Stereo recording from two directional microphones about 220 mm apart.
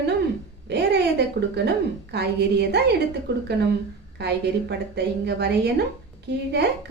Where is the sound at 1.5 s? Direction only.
50° right (ahead or behind).